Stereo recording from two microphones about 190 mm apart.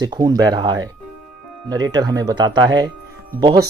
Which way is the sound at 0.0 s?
20° right (ahead or behind).